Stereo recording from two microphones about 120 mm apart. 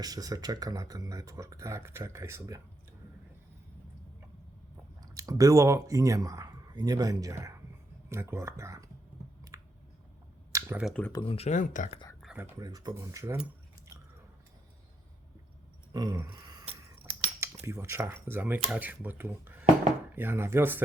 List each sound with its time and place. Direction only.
0.0 s speech: 30° right (ahead or behind)
5.1 s speech: 30° right (ahead or behind)
9.5 s a sound: 25° right (ahead or behind)
10.5 s computer keyboard: 25° right (ahead or behind)
11.1 s speech: 40° left (ahead or behind)
11.3 s speech: 80° left
12.4 s speech: 30° right (ahead or behind)
15.9 s a sound: 35° right (ahead or behind)
17.0 s speech: 20° right (ahead or behind)